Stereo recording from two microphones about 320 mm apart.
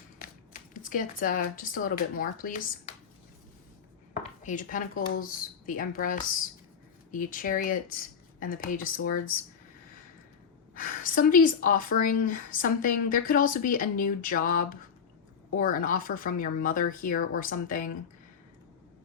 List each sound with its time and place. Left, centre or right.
0.7 s a woman's voice: left
4.1 s a sound: left
5.2 s a woman's voice: left
10.8 s a woman's voice: left